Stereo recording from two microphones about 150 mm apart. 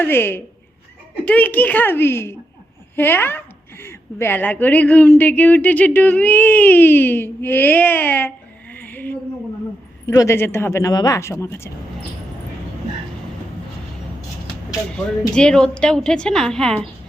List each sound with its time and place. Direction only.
0.0 s a woman's voice: 15° left (ahead or behind)
8.7 s a sound: 10° left (ahead or behind)
10.1 s a woman's voice: 20° left (ahead or behind)
14.7 s speech: 5° left (ahead or behind)